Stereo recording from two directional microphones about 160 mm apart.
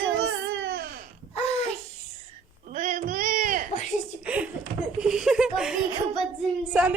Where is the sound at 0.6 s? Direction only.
90° right.